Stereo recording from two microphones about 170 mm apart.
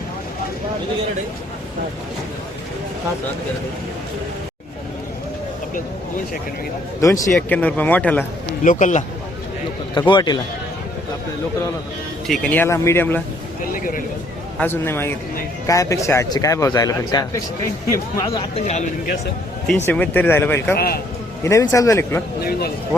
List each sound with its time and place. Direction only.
7.0 s speech: 20° left (ahead or behind)
8.6 s speech: 45° left (ahead or behind)
10.1 s speech: 25° left (ahead or behind)
12.3 s speech: 5° left (ahead or behind)
13.7 s speech: 55° left (ahead or behind)
14.6 s speech: 15° left (ahead or behind)
18.3 s speech: 30° left (ahead or behind)
18.6 s speech: 45° left (ahead or behind)
19.6 s speech: 10° left (ahead or behind)
20.7 s speech: 65° left (ahead or behind)
21.4 s speech: 15° left (ahead or behind)
22.4 s speech: 65° left (ahead or behind)